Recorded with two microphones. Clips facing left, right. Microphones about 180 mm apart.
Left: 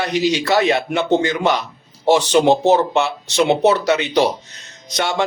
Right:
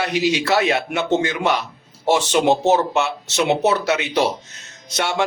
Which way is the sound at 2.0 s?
35° left (ahead or behind).